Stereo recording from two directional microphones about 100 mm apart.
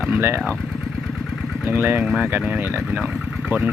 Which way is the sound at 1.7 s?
20° right (ahead or behind).